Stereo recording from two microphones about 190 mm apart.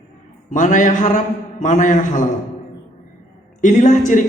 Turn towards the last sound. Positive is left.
turn(degrees=40)  # may be behind; listen again after turning